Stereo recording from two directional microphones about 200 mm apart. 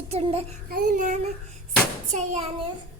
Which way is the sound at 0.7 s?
45° right (ahead or behind).